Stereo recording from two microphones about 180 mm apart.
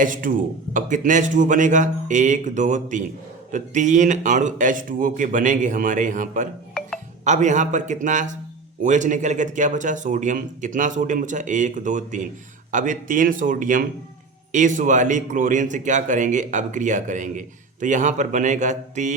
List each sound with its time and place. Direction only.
0.0 s speech: 50° right (ahead or behind)